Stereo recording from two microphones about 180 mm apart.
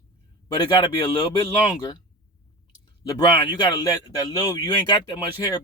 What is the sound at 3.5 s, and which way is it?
Speech, 20° left (ahead or behind).